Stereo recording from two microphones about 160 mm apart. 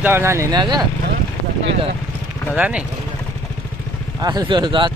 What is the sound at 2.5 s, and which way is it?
Speech, 5° right (ahead or behind).